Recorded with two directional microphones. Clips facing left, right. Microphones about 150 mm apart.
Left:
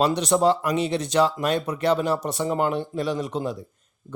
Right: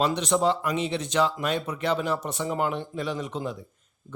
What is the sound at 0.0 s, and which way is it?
Speech, 40° left (ahead or behind).